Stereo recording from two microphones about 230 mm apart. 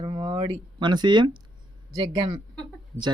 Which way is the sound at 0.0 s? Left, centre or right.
Centre.